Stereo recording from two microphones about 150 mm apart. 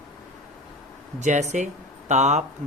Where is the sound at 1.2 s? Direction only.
50° right (ahead or behind).